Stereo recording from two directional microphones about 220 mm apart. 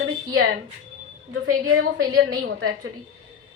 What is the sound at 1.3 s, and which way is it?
Speech, 75° right (ahead or behind).